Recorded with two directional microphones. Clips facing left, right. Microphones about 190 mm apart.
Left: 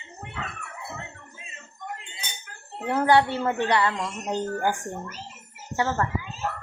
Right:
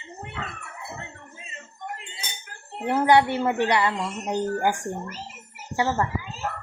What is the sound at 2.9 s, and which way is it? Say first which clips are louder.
A woman's voice: right 1 dB; 15° right (ahead or behind).